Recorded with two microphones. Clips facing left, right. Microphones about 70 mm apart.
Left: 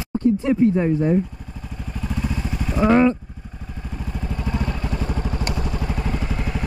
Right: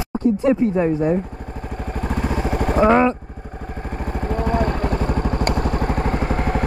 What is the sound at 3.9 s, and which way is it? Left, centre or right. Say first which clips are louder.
Vehicle: right 6 dB; right.